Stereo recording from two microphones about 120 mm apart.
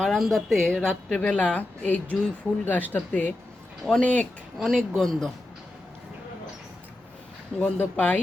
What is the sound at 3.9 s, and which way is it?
A woman's voice, centre (ahead or behind).